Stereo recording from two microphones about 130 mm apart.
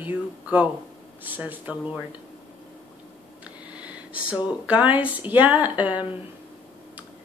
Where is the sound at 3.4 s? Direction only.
10° right (ahead or behind).